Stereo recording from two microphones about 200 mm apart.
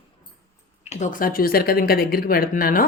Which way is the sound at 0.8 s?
35° left (ahead or behind).